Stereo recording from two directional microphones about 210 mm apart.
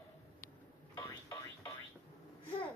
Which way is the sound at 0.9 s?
15° left (ahead or behind).